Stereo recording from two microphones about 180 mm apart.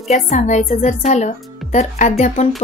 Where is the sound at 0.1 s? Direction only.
40° left (ahead or behind).